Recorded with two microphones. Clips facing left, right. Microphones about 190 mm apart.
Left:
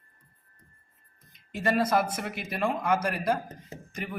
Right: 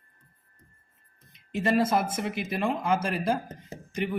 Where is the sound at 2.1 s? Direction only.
25° right (ahead or behind).